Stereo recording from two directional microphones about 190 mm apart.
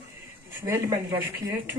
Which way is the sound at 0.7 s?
15° right (ahead or behind).